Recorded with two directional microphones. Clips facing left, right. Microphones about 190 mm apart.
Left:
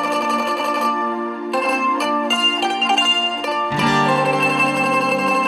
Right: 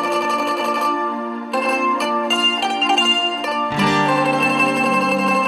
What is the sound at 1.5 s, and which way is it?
Zither, centre (ahead or behind).